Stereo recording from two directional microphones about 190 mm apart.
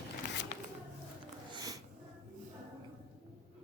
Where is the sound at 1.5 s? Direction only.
20° right (ahead or behind).